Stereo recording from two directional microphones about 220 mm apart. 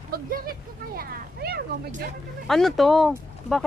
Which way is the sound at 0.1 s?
40° right (ahead or behind).